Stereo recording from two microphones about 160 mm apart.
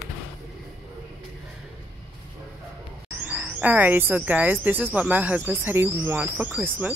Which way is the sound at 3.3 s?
10° right (ahead or behind).